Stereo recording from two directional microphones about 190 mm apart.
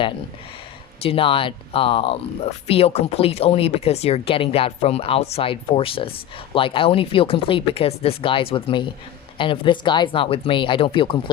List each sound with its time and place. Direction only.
1.0 s speech: 30° left (ahead or behind)